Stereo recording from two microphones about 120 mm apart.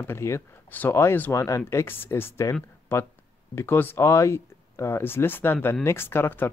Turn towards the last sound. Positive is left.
turn(degrees=20)  # may be behind; listen again after turning